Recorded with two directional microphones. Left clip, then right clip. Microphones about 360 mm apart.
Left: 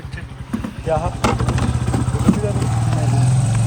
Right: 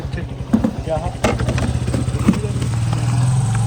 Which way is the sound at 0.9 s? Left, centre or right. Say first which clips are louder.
Left 6 dB; left.